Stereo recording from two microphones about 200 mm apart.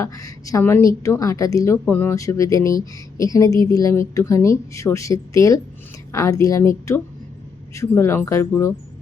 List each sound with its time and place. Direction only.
0.0 s a woman's voice: 15° left (ahead or behind)